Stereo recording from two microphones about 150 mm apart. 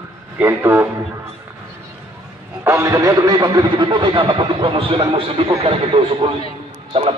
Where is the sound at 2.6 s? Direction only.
20° right (ahead or behind).